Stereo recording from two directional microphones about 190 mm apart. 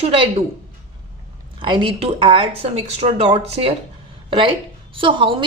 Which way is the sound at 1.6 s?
25° right (ahead or behind).